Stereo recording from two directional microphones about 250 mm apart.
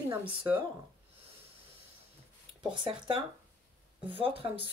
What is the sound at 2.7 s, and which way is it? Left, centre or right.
Speech, centre.